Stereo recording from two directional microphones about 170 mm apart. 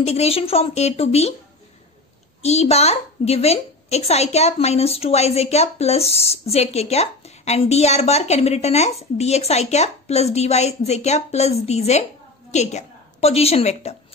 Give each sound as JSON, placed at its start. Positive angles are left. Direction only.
{"t": 0.0, "sound": "a woman's voice", "side_deg": 35}
{"t": 2.4, "sound": "a woman's voice", "side_deg": 40}